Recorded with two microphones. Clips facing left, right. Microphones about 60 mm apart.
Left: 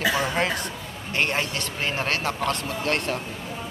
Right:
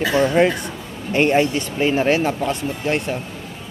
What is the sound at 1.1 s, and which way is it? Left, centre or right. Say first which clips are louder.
A man's voice: right 9 dB; centre.